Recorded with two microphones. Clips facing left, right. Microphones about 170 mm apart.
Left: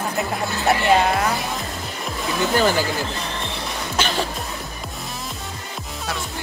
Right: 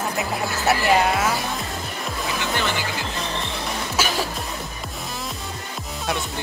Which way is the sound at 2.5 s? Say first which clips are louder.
Left 8 dB; 40° left (ahead or behind).